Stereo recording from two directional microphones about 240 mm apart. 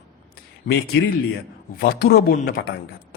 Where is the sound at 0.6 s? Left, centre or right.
Left.